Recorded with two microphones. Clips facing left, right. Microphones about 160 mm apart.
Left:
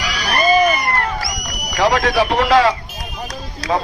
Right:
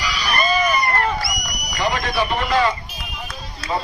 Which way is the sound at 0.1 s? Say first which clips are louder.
Left 6 dB; 80° left.